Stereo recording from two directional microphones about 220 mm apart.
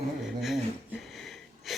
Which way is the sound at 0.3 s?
Centre (ahead or behind).